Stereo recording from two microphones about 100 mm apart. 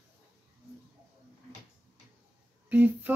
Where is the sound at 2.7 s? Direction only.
15° right (ahead or behind).